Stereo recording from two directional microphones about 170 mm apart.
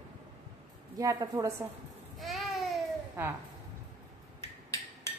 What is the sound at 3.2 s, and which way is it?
Speech, 15° right (ahead or behind).